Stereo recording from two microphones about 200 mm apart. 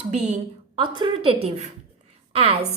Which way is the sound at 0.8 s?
25° right (ahead or behind).